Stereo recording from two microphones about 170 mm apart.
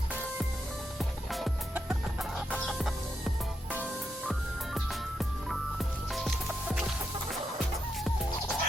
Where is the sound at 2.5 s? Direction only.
Centre (ahead or behind).